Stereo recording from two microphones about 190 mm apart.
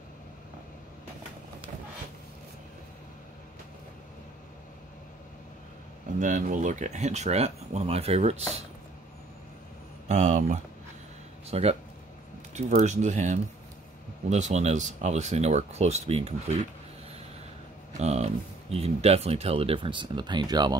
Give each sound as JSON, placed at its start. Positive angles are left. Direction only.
{"t": 6.1, "sound": "speech", "side_deg": -40}
{"t": 10.0, "sound": "speech", "side_deg": -40}
{"t": 17.9, "sound": "speech", "side_deg": -35}